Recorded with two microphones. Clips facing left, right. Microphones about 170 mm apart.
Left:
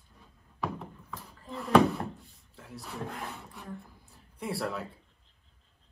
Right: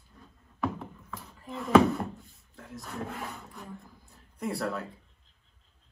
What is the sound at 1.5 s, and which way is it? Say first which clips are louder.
Speech: right 2 dB; centre (ahead or behind).